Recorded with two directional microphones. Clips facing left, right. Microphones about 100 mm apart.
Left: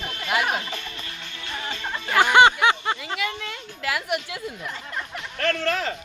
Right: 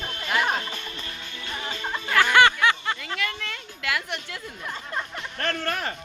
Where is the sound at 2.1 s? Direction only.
20° left (ahead or behind).